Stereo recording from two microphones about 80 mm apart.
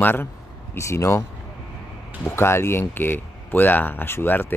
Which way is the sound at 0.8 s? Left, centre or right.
Left.